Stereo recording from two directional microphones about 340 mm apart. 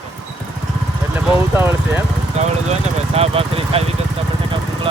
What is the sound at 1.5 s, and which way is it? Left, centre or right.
Speech, centre.